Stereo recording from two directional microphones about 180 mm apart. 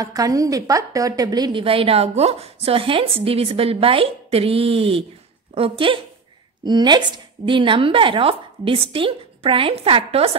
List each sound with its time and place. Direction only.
0.0 s a woman's voice: 20° right (ahead or behind)